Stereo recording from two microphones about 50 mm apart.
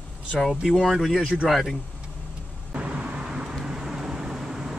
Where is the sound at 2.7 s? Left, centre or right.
Right.